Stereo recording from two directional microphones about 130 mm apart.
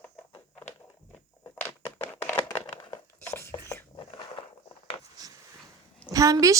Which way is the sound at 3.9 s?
40° left (ahead or behind).